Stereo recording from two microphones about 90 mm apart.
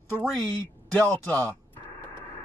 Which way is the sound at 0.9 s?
15° left (ahead or behind).